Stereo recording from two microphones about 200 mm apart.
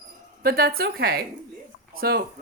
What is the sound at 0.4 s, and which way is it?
Speech, 50° right (ahead or behind).